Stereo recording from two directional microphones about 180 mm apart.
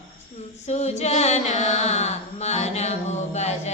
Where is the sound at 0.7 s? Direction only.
40° left (ahead or behind).